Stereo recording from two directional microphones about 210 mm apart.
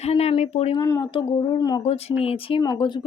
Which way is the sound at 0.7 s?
15° left (ahead or behind).